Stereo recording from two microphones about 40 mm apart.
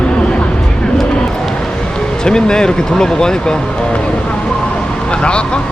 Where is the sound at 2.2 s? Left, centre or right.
Centre.